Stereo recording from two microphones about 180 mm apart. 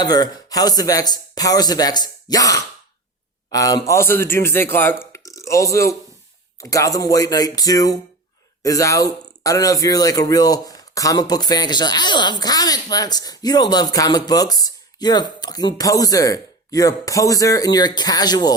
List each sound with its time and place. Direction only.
0.0 s a man's voice: 20° left (ahead or behind)
5.1 s a sound: 15° left (ahead or behind)
6.6 s speech: 20° left (ahead or behind)